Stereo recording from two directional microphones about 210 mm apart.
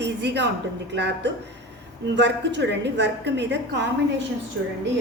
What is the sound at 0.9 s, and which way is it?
A woman's voice, 55° right (ahead or behind).